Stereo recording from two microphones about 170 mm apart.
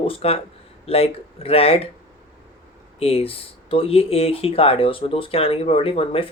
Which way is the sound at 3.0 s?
35° left (ahead or behind).